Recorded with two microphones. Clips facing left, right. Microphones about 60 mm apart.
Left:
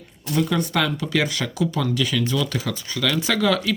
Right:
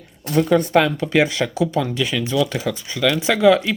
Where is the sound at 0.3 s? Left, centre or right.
Right.